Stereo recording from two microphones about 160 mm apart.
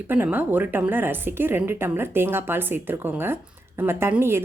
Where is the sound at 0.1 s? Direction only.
10° right (ahead or behind).